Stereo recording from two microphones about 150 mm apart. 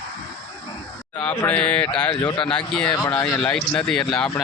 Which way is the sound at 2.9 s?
25° left (ahead or behind).